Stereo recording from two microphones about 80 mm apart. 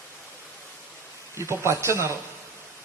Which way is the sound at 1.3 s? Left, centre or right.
Right.